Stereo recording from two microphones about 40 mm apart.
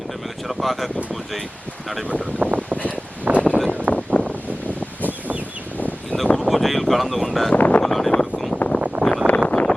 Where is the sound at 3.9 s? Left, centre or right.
Left.